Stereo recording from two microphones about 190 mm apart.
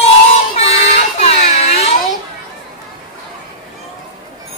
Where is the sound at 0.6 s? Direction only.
30° left (ahead or behind).